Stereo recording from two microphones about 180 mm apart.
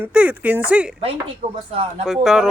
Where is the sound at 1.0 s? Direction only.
30° right (ahead or behind).